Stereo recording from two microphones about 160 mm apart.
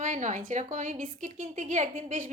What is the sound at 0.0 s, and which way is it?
Speech, 50° right (ahead or behind).